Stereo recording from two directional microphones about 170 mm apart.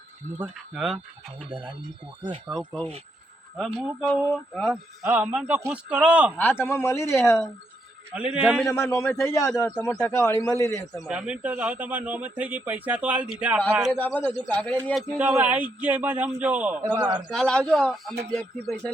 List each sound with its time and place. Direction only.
0.3 s a man's voice: 5° right (ahead or behind)
2.5 s a man's voice: 5° left (ahead or behind)
4.7 s a man's voice: 10° right (ahead or behind)
6.3 s speech: 10° left (ahead or behind)
8.1 s a man's voice: 5° right (ahead or behind)
8.6 s speech: 15° left (ahead or behind)
9.5 s a man's voice: 5° left (ahead or behind)
11.0 s a man's voice: 5° right (ahead or behind)
13.9 s speech: 10° left (ahead or behind)
15.2 s a man's voice: 10° right (ahead or behind)
17.3 s a man's voice: 5° left (ahead or behind)